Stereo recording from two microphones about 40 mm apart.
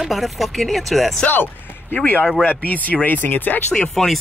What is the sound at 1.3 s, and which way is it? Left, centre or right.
Music, left.